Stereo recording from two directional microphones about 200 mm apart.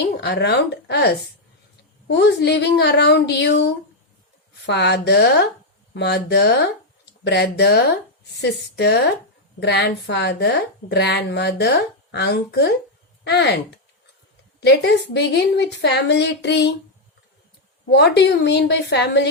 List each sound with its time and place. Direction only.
0.0 s a woman's voice: 55° left (ahead or behind)
17.9 s a woman's voice: 60° left (ahead or behind)